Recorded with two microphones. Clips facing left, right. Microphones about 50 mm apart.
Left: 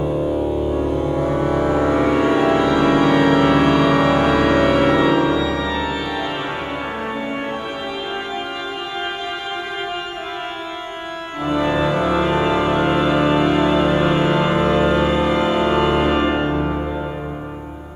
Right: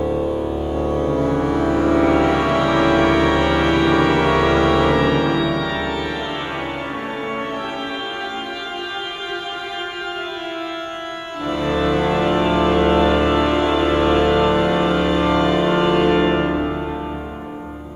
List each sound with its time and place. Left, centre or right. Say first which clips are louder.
0.9 s music: right 1 dB; centre
4.0 s music: even; centre
4.5 s music: left 1 dB; centre
5.9 s organ: even; centre
11.4 s organ: left 1 dB; centre
12.2 s music: even; centre